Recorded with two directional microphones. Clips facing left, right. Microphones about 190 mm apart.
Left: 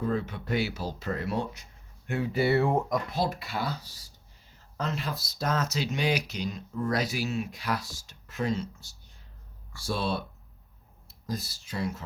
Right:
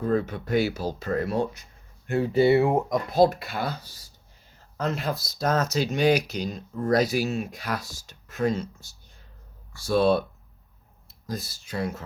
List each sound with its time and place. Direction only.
0.2 s speech: 45° right (ahead or behind)
2.3 s speech: 20° right (ahead or behind)
3.1 s speech: 50° right (ahead or behind)
4.8 s speech: 50° right (ahead or behind)
9.9 s speech: 50° right (ahead or behind)
11.3 s speech: 50° right (ahead or behind)